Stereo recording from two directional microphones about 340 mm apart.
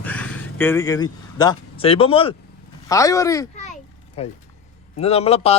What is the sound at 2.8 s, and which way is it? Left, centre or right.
Speech, centre.